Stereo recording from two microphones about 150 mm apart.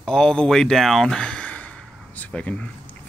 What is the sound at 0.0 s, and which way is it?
Speech, 5° left (ahead or behind).